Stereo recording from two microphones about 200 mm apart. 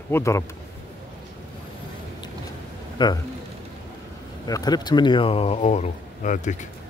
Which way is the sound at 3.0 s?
20° left (ahead or behind).